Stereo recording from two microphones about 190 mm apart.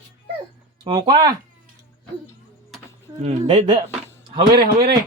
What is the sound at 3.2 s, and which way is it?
Speech, 35° right (ahead or behind).